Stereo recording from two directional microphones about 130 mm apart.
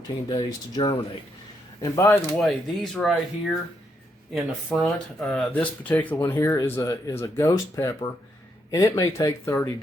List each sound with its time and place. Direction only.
0.3 s speech: 30° left (ahead or behind)
2.4 s speech: 5° left (ahead or behind); by 9.6 s 25° left (ahead or behind)